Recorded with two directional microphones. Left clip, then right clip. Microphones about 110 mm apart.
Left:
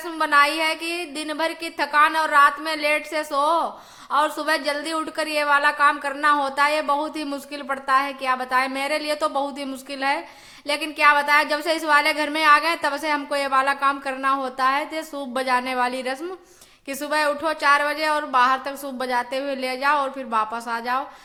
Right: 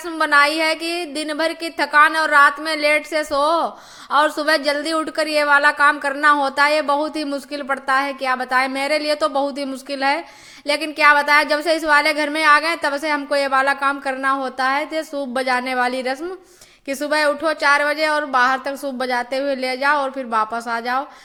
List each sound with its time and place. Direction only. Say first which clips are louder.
0.2 s a woman's voice: right 3 dB; 40° right (ahead or behind)